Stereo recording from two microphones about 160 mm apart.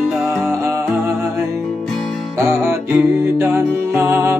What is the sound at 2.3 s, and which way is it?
Music, 15° right (ahead or behind).